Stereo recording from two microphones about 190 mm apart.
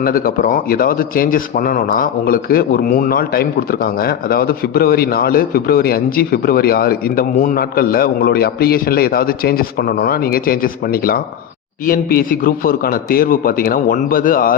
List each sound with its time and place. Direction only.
0.0 s speech: 50° left (ahead or behind)